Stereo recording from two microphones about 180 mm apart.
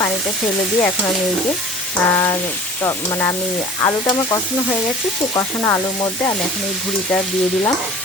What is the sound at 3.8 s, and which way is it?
Frying, 20° left (ahead or behind).